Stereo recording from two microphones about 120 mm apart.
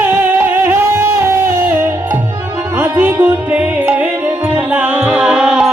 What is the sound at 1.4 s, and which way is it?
Music, 20° right (ahead or behind).